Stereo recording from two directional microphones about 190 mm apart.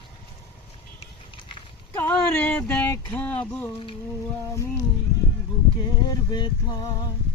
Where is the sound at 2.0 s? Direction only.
10° left (ahead or behind).